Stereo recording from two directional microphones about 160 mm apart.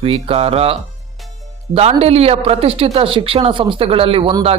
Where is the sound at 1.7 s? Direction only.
40° right (ahead or behind).